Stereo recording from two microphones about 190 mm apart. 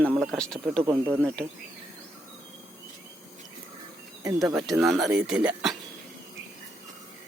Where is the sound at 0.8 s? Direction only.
10° right (ahead or behind).